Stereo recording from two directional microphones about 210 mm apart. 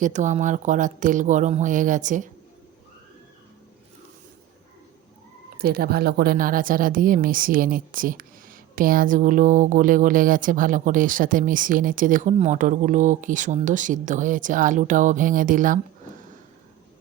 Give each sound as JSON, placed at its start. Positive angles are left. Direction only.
{"t": 0.0, "sound": "a woman's voice", "side_deg": -35}
{"t": 5.5, "sound": "a woman's voice", "side_deg": -45}